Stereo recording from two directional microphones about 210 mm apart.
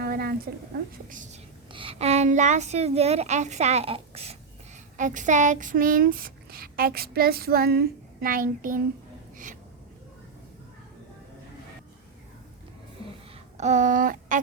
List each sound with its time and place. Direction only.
0.0 s a sound: 50° right (ahead or behind)
1.1 s speech: 35° right (ahead or behind)
1.7 s speech: 25° right (ahead or behind); by 8.8 s 40° right (ahead or behind)
13.6 s speech: 35° right (ahead or behind)